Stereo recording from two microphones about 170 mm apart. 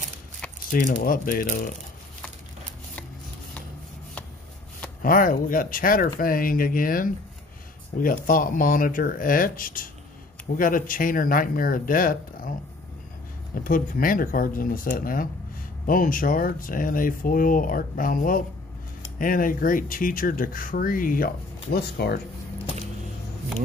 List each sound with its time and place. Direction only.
0.7 s speech: 55° left (ahead or behind)
5.0 s speech: 55° left (ahead or behind)
13.7 s speech: 55° left (ahead or behind)